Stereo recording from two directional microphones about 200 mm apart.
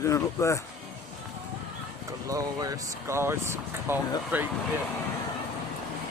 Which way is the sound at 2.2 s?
15° right (ahead or behind).